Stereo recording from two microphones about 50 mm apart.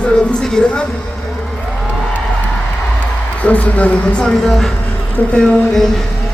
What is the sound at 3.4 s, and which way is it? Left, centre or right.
Speech, left.